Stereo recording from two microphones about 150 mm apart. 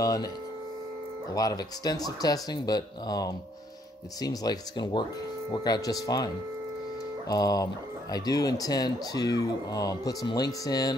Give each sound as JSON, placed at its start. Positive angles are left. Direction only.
{"t": 0.0, "sound": "speech", "side_deg": 25}
{"t": 1.3, "sound": "speech", "side_deg": 25}